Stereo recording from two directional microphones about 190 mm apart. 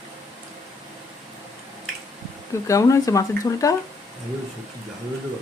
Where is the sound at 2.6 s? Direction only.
15° left (ahead or behind).